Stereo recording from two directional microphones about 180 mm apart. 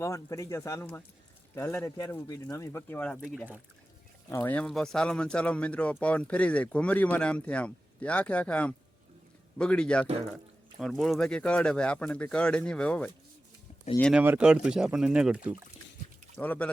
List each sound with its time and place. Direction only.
0.0 s speech: 20° left (ahead or behind)
14.0 s speech: 5° right (ahead or behind)
16.4 s speech: 10° left (ahead or behind)